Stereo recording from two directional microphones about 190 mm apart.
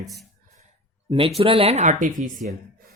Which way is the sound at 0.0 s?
Centre (ahead or behind).